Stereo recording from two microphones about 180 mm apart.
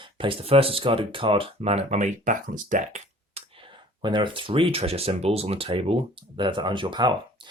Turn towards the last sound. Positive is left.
turn(degrees=-25)  # may be behind; listen again after turning